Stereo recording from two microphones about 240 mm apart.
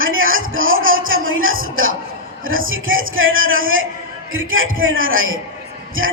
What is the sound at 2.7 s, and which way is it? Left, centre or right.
A man's voice, right.